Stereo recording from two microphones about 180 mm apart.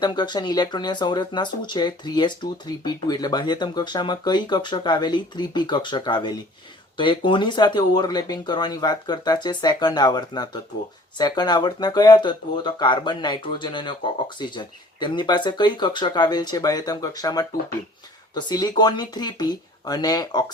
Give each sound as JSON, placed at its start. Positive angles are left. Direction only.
{"t": 0.0, "sound": "speech", "side_deg": 25}